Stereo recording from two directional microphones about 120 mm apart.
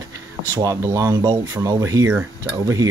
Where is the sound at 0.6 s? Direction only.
25° right (ahead or behind).